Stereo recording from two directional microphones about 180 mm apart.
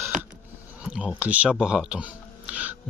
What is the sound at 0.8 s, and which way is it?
Speech, 5° right (ahead or behind).